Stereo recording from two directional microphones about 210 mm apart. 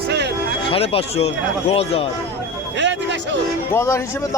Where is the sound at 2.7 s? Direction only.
60° right (ahead or behind).